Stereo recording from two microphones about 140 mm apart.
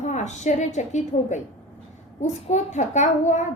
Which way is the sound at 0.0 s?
55° left (ahead or behind).